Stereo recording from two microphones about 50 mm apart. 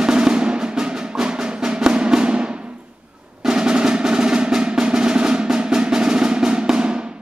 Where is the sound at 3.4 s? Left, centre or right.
Centre.